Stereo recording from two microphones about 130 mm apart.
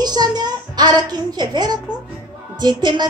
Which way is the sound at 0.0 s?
30° right (ahead or behind).